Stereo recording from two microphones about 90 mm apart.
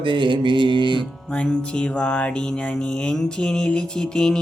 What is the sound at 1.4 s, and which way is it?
Music, 10° left (ahead or behind).